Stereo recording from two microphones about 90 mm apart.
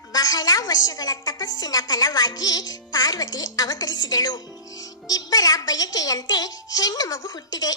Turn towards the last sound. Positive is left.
turn(degrees=45)  # may be behind; listen again after turning